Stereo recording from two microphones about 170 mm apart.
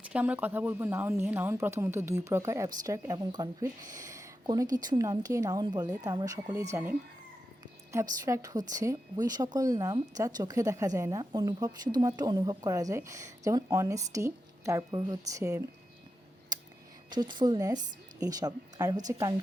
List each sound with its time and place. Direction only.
0.0 s speech: 10° right (ahead or behind)
8.2 s a woman's voice: 20° right (ahead or behind)
16.5 s a sound: 20° right (ahead or behind)
17.1 s a woman's voice: 25° right (ahead or behind)